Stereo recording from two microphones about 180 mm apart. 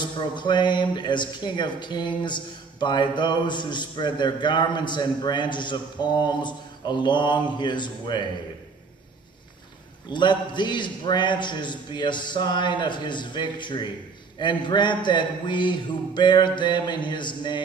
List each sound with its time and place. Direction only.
0.0 s speech: 25° left (ahead or behind)
10.1 s speech: 25° left (ahead or behind)